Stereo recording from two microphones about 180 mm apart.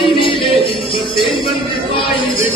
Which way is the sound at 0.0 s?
30° left (ahead or behind).